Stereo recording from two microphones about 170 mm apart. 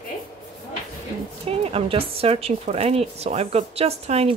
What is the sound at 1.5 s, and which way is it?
A woman's voice, 35° right (ahead or behind).